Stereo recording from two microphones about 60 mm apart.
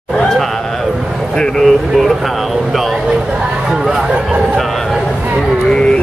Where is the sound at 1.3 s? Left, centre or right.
Centre.